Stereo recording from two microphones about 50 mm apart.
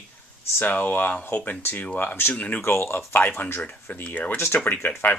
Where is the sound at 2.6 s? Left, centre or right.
Left.